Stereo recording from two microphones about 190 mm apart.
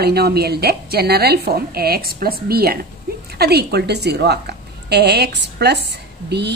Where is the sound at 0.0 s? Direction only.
55° right (ahead or behind).